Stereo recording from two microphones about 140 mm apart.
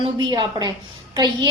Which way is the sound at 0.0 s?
30° right (ahead or behind).